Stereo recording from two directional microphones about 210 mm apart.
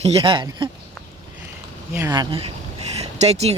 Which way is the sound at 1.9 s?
15° right (ahead or behind).